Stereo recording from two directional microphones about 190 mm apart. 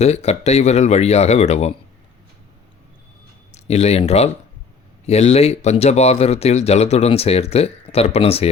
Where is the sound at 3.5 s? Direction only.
35° left (ahead or behind).